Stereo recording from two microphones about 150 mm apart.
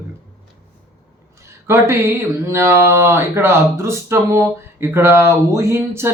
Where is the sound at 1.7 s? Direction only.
15° right (ahead or behind).